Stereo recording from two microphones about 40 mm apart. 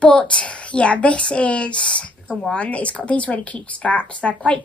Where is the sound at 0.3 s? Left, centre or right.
Left.